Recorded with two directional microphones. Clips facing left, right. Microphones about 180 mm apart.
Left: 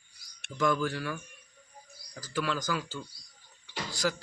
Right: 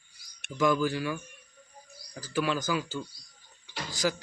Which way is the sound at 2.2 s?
10° right (ahead or behind).